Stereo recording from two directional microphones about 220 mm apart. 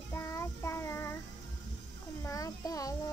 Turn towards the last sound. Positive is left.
turn(degrees=15)  # may be behind; listen again after turning